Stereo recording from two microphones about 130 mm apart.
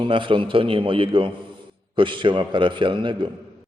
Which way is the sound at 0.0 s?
40° right (ahead or behind).